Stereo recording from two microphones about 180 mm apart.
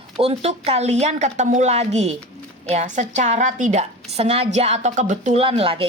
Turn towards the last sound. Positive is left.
turn(degrees=-30)  # may be behind; listen again after turning